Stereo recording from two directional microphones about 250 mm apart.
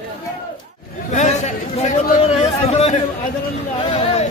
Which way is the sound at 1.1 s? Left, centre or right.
Left.